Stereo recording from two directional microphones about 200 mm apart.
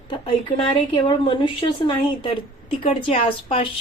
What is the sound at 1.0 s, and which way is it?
Speech, 25° left (ahead or behind).